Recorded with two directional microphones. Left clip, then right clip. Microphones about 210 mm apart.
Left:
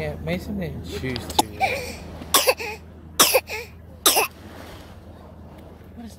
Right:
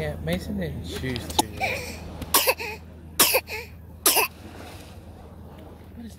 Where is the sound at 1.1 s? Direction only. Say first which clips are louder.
Left 3 dB; 15° left (ahead or behind).